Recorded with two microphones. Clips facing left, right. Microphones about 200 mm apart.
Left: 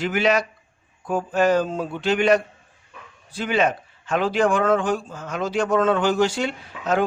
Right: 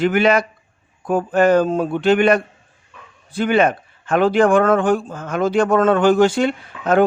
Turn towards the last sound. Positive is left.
turn(degrees=-55)  # may be behind; listen again after turning